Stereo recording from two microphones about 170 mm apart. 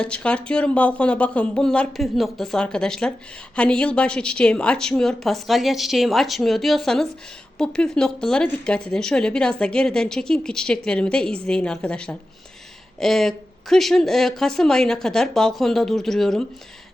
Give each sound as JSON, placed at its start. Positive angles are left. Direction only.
{"t": 0.0, "sound": "a woman's voice", "side_deg": 5}